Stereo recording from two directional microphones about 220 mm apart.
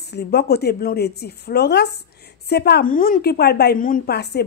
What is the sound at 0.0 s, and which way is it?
Speech, 50° left (ahead or behind).